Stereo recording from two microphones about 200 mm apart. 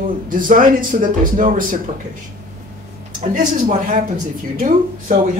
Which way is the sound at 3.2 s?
40° right (ahead or behind).